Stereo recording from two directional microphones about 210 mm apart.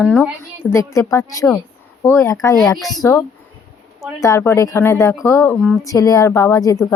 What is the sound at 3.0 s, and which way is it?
A woman's voice, 15° left (ahead or behind).